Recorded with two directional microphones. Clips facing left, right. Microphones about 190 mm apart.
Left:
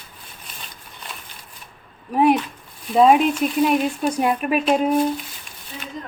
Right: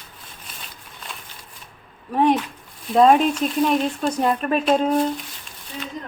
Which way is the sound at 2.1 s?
10° left (ahead or behind).